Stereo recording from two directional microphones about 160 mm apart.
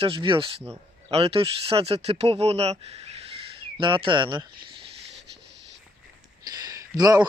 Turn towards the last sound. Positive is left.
turn(degrees=-25)  # may be behind; listen again after turning